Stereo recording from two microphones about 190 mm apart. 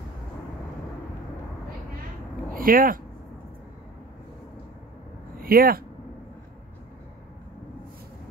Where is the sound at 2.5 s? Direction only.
45° right (ahead or behind).